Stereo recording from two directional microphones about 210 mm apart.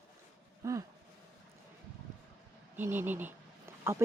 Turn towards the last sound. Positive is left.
turn(degrees=-10)  # may be behind; listen again after turning